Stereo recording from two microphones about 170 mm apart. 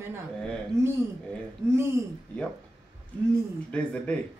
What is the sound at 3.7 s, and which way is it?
Speech, 5° left (ahead or behind).